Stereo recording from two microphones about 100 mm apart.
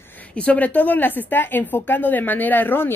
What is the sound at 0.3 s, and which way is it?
A woman's voice, 15° left (ahead or behind).